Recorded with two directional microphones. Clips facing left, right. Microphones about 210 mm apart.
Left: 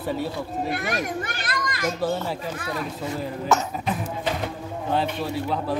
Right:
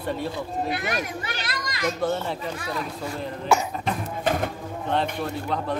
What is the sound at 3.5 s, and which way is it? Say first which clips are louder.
Speech: right 1 dB; 10° right (ahead or behind).